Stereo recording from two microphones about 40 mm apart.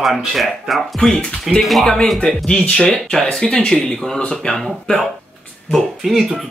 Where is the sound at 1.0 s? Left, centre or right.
Centre.